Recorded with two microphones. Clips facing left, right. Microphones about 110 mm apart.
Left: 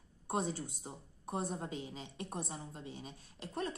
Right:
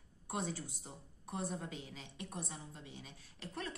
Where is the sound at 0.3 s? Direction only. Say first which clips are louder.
Left 4 dB; 25° left (ahead or behind).